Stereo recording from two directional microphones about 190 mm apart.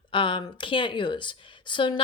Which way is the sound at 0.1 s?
25° left (ahead or behind).